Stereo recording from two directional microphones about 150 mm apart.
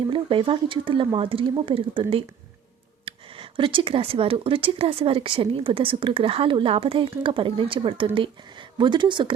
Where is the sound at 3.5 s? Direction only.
35° right (ahead or behind).